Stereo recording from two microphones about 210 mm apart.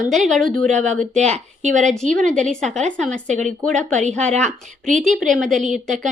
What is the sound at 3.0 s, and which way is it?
Speech, 5° left (ahead or behind).